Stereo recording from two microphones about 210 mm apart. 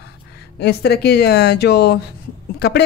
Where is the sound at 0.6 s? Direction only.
50° left (ahead or behind).